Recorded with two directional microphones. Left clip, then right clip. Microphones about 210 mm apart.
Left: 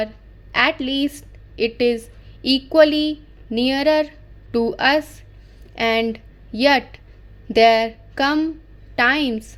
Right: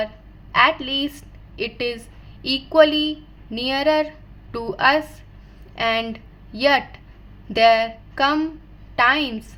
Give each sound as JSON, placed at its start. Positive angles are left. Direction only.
{"t": 0.5, "sound": "a woman's voice", "side_deg": 40}